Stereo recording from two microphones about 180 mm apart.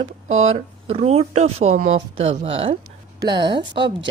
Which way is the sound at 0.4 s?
35° right (ahead or behind).